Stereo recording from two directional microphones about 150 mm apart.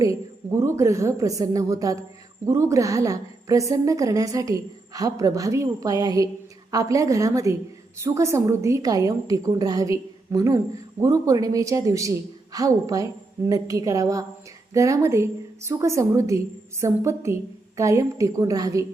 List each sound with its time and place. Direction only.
0.0 s a woman's voice: 20° right (ahead or behind)